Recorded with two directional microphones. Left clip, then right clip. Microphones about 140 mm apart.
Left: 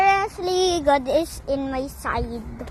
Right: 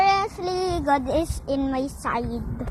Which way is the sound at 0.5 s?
60° left (ahead or behind).